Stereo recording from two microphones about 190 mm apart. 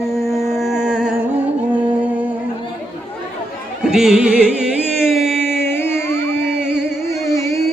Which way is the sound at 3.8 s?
Centre (ahead or behind).